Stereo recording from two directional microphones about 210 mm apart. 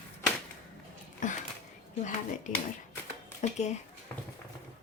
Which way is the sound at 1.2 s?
35° left (ahead or behind).